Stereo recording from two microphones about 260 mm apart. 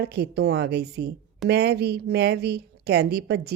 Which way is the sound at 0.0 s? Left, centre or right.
Right.